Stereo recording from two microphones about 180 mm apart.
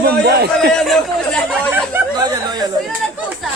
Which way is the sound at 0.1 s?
65° right (ahead or behind).